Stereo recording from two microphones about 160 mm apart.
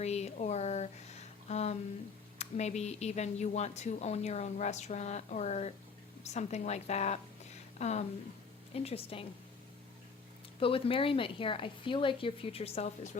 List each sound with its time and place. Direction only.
0.0 s speech: 45° left (ahead or behind)
1.5 s a sound: 45° left (ahead or behind)
2.4 s speech: 45° left (ahead or behind)
10.6 s speech: 35° left (ahead or behind)